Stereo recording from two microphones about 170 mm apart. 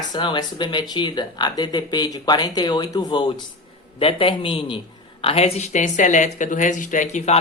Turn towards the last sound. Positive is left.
turn(degrees=45)  # may be behind; listen again after turning